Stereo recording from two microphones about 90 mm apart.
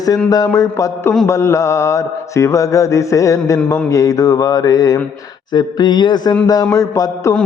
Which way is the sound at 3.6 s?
10° left (ahead or behind).